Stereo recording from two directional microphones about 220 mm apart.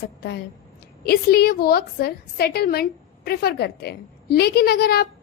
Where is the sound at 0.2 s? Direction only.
50° left (ahead or behind).